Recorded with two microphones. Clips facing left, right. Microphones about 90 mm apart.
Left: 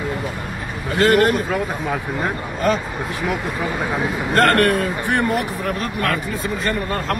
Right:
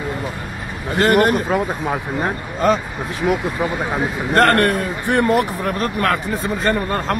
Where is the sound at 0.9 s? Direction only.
25° right (ahead or behind).